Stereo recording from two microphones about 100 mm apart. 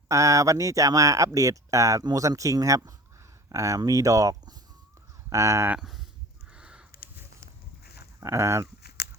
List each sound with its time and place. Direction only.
0.1 s speech: 30° right (ahead or behind)
5.7 s speech: 5° right (ahead or behind)
6.5 s a sound: 10° right (ahead or behind)
8.2 s speech: 30° right (ahead or behind)